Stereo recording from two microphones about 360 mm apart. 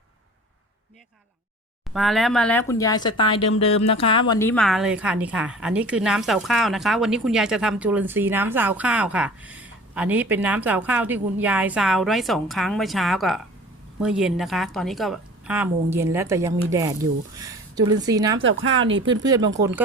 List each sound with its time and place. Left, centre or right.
1.9 s a woman's voice: centre
18.3 s speech: right
19.2 s speech: centre